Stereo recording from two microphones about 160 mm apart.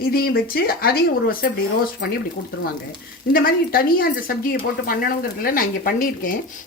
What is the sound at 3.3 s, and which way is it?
Speech, 65° left (ahead or behind).